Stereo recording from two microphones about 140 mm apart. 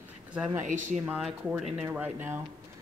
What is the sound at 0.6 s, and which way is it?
Speech, 65° right (ahead or behind).